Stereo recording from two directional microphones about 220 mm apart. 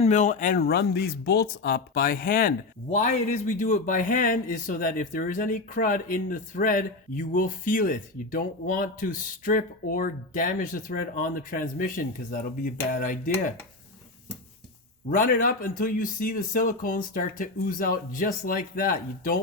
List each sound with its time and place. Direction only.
0.0 s speech: 35° left (ahead or behind)
15.1 s speech: 40° left (ahead or behind)